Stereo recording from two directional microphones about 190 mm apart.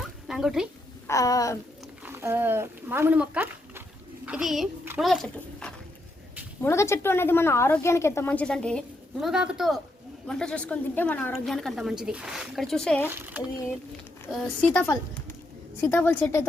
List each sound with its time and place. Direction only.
0.3 s speech: centre (ahead or behind)
1.0 s a woman's voice: 15° left (ahead or behind)
2.0 s a woman's voice: 10° right (ahead or behind)
6.6 s a woman's voice: 15° left (ahead or behind)
13.1 s speech: 10° right (ahead or behind)
14.3 s a woman's voice: centre (ahead or behind)